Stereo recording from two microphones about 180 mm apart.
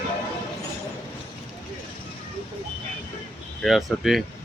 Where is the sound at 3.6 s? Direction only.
Centre (ahead or behind).